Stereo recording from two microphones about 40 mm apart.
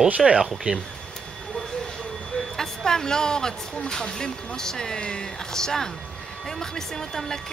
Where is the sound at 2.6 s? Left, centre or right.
Centre.